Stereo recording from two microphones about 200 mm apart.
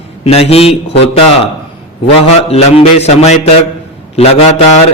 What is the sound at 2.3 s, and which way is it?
A man's voice, 30° left (ahead or behind).